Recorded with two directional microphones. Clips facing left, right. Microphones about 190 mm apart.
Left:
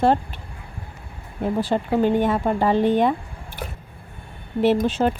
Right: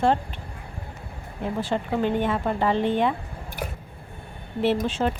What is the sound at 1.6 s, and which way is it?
Speech, 40° left (ahead or behind).